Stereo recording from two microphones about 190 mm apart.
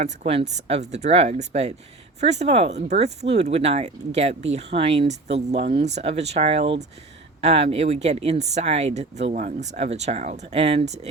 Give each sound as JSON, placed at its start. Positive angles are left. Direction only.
{"t": 0.0, "sound": "speech", "side_deg": -35}